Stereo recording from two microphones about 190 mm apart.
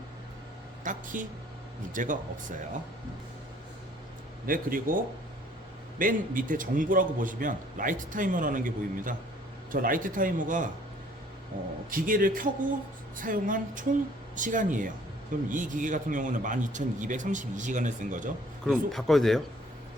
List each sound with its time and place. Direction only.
0.9 s a man's voice: 45° right (ahead or behind)
4.4 s a man's voice: 45° right (ahead or behind)
6.0 s a man's voice: 45° right (ahead or behind)
11.9 s a man's voice: 45° right (ahead or behind)
18.6 s speech: centre (ahead or behind)